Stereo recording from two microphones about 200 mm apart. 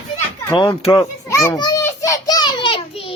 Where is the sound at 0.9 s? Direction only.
15° left (ahead or behind).